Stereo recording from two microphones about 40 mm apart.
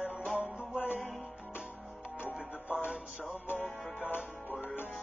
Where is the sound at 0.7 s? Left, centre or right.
Left.